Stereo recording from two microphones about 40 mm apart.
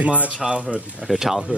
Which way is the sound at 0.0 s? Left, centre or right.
Right.